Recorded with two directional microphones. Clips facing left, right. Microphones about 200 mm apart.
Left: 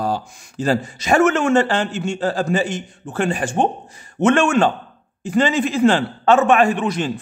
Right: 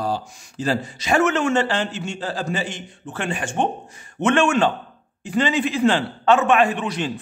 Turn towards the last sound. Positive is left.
turn(degrees=45)  # may be behind; listen again after turning